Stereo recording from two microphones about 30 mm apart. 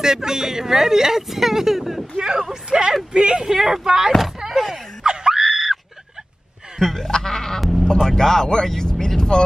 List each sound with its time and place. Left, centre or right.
0.0 s speech: centre
2.5 s speech: right
3.5 s speech: centre
4.5 s a sound: centre
5.0 s screaming: right
5.4 s screaming: centre
6.8 s music: centre
7.1 s speech: left